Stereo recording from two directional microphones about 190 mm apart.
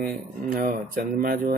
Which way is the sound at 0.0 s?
50° right (ahead or behind).